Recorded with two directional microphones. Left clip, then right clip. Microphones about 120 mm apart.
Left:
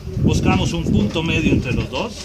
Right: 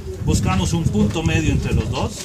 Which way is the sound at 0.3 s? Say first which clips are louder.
Left 3 dB; 30° right (ahead or behind).